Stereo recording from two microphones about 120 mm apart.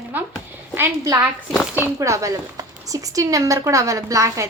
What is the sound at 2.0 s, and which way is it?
A woman's voice, 25° right (ahead or behind).